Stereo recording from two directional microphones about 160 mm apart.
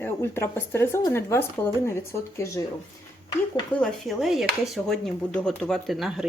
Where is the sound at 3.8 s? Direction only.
Centre (ahead or behind).